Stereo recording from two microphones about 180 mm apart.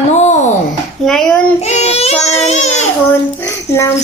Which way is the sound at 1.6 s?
35° left (ahead or behind).